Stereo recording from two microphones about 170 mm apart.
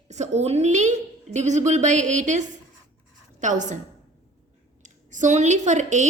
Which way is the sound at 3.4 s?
45° right (ahead or behind).